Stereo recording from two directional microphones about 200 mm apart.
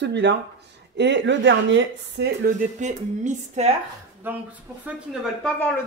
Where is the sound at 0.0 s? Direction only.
60° right (ahead or behind); by 3.7 s 35° right (ahead or behind).